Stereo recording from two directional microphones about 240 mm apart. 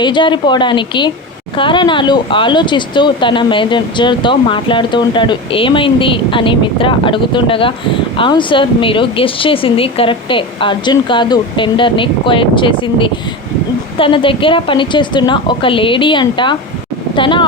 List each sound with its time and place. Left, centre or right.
0.0 s speech: centre